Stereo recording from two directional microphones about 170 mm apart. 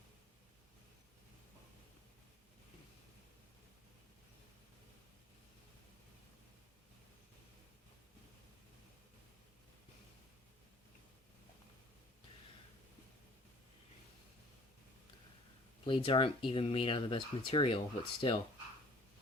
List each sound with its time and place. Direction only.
15.9 s speech: 30° left (ahead or behind)